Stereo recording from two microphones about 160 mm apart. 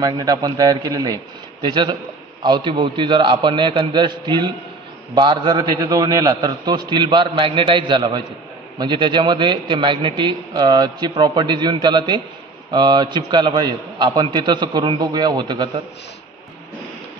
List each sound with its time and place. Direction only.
0.0 s a man's voice: 25° right (ahead or behind)